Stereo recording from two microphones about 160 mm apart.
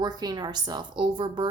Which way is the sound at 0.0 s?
25° right (ahead or behind).